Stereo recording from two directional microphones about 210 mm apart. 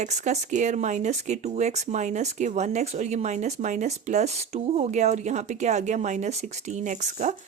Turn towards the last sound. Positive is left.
turn(degrees=-35)  # may be behind; listen again after turning